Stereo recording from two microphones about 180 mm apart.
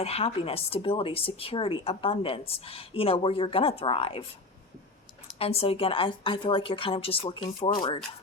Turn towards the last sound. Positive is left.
turn(degrees=25)  # may be behind; listen again after turning